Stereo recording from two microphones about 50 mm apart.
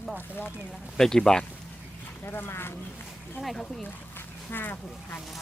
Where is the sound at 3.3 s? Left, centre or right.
Centre.